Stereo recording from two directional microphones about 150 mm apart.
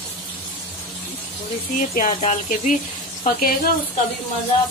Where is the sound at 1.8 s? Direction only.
60° left (ahead or behind).